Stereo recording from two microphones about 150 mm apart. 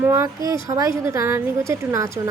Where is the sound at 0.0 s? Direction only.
20° right (ahead or behind).